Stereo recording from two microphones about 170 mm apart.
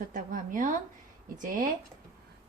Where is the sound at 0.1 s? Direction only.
50° right (ahead or behind).